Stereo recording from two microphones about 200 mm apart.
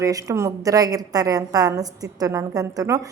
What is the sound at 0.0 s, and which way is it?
A woman's voice, 15° right (ahead or behind).